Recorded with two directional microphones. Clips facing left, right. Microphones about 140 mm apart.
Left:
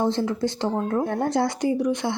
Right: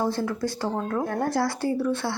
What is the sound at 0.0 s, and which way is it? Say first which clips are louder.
Speech: left 3 dB; 20° left (ahead or behind).